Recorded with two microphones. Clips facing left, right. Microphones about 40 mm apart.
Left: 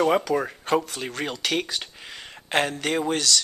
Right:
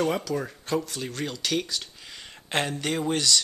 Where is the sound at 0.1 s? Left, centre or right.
Left.